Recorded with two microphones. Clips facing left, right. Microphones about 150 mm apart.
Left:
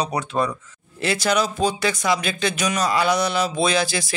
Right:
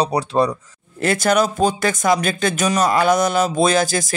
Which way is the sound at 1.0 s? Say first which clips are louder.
Right 4 dB; 50° right (ahead or behind).